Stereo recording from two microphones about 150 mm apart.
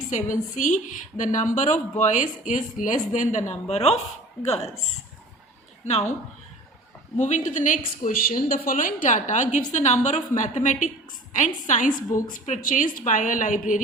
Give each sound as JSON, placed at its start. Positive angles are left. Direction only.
{"t": 0.1, "sound": "a woman's voice", "side_deg": 55}
{"t": 5.8, "sound": "a woman's voice", "side_deg": 50}
{"t": 7.2, "sound": "speech", "side_deg": 55}
{"t": 8.0, "sound": "speech", "side_deg": 70}